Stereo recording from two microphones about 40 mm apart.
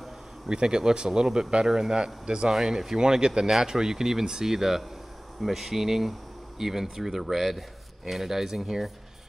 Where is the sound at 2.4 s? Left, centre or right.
Centre.